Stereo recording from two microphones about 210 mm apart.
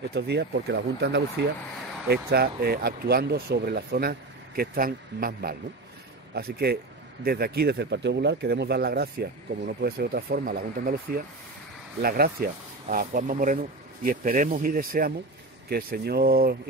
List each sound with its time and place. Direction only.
0.1 s speech: 50° right (ahead or behind)